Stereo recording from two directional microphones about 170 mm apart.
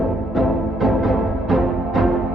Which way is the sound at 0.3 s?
Centre (ahead or behind).